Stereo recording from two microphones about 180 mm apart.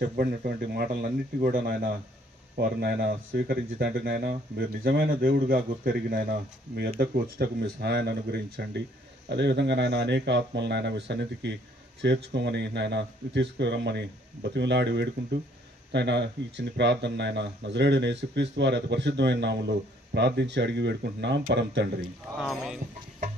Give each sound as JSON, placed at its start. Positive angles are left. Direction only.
{"t": 0.1, "sound": "speech", "side_deg": -55}
{"t": 22.4, "sound": "speech", "side_deg": 0}